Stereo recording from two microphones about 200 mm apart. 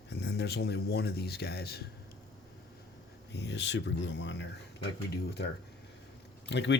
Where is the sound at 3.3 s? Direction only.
60° left (ahead or behind).